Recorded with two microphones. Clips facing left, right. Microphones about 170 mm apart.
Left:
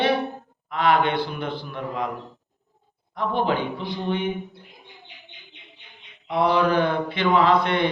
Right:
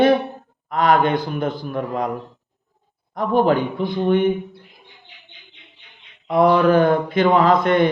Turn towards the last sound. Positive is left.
turn(degrees=-45)  # may be behind; listen again after turning